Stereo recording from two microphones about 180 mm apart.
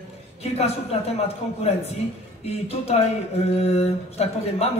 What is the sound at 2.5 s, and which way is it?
A woman's voice, 35° left (ahead or behind).